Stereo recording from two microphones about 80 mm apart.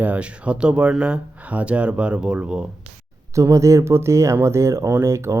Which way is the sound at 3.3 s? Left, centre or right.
Right.